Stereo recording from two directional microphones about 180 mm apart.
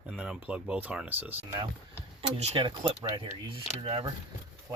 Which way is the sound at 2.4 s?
30° right (ahead or behind).